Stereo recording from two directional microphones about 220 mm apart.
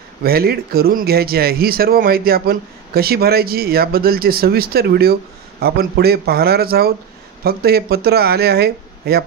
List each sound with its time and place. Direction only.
0.2 s speech: 45° right (ahead or behind)